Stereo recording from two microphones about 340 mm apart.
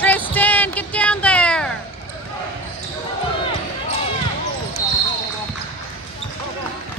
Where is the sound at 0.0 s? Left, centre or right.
Centre.